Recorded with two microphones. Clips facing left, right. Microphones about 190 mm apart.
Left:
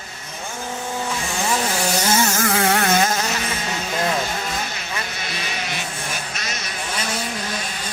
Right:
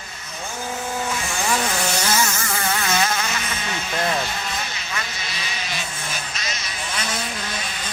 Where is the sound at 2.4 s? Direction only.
75° left (ahead or behind); by 3.3 s 45° left (ahead or behind).